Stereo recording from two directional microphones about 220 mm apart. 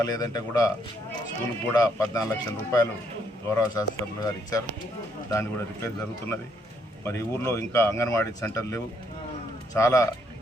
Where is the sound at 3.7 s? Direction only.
15° left (ahead or behind).